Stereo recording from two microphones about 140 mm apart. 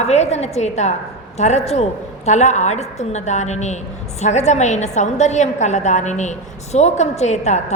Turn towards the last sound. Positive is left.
turn(degrees=50)  # may be behind; listen again after turning